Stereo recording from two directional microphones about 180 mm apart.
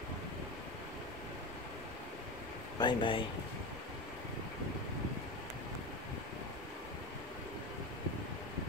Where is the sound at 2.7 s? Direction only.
25° left (ahead or behind).